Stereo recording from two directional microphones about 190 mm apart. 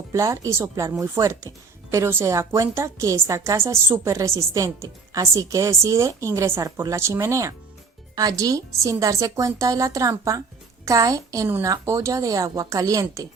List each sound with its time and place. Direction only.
0.1 s speech: 15° right (ahead or behind)